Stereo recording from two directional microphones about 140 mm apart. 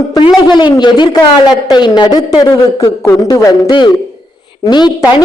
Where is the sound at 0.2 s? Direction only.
35° left (ahead or behind).